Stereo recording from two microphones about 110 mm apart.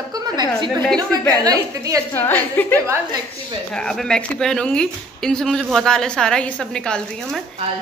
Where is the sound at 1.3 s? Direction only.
35° right (ahead or behind).